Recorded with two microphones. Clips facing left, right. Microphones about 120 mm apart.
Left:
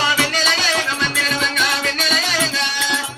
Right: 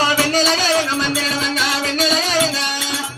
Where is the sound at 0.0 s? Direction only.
35° right (ahead or behind).